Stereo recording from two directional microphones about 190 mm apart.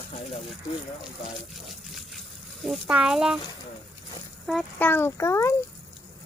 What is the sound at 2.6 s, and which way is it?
Speech, 5° right (ahead or behind).